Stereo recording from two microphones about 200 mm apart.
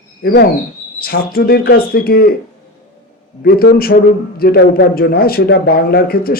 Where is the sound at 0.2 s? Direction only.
50° left (ahead or behind).